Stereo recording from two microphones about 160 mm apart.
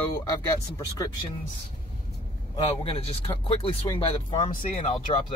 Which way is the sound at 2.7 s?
35° left (ahead or behind).